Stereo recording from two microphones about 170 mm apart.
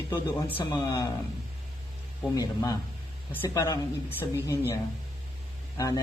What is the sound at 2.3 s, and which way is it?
A man's voice, 20° left (ahead or behind).